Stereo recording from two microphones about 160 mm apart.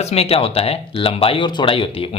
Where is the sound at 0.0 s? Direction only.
40° left (ahead or behind).